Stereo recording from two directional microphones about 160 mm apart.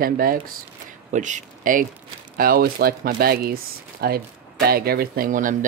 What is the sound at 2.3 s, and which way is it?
Speech, 65° right (ahead or behind).